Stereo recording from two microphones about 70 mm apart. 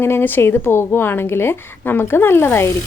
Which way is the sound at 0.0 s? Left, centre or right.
Left.